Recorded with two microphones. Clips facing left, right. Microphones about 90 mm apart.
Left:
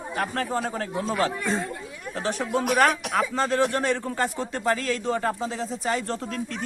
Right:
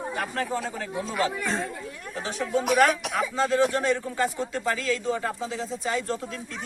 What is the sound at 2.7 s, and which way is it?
Speech, 50° left (ahead or behind).